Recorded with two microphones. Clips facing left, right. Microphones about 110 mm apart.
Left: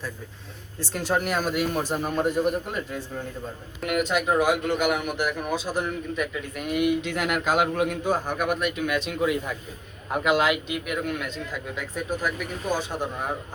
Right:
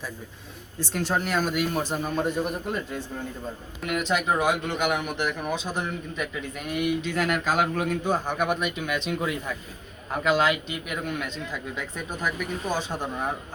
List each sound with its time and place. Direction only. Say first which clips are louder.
0.9 s a man's voice: left 1 dB; 5° left (ahead or behind)
3.8 s speech: left 3 dB; 55° left (ahead or behind)
4.1 s a man's voice: left 1 dB; 5° left (ahead or behind)